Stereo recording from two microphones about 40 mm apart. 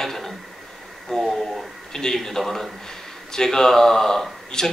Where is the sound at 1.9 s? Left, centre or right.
Centre.